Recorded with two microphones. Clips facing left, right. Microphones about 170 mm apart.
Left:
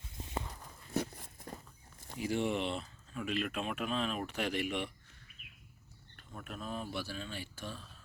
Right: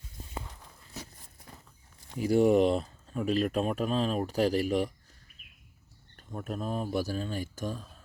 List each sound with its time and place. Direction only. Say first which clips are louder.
2.1 s speech: right 11 dB; 40° right (ahead or behind)
6.1 s speech: right 9 dB; 40° right (ahead or behind)